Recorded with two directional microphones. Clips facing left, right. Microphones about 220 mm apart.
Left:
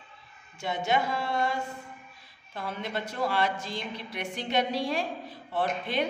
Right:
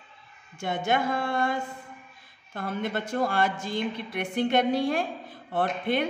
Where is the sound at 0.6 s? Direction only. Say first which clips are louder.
Right 1 dB; 50° right (ahead or behind).